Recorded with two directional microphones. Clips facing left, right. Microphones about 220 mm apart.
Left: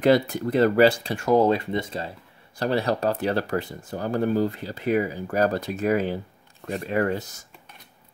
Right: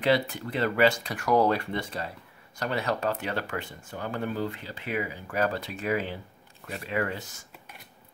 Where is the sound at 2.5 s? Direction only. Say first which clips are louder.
Left 6 dB; 35° left (ahead or behind).